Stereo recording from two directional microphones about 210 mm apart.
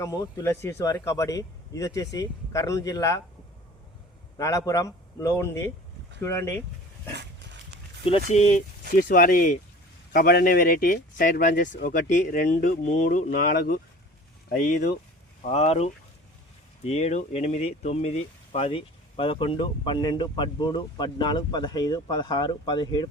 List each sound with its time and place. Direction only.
0.0 s speech: 15° left (ahead or behind)
4.4 s speech: 15° left (ahead or behind)
8.3 s speech: 35° left (ahead or behind)